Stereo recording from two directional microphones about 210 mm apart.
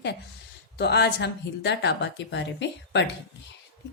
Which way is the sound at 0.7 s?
50° left (ahead or behind).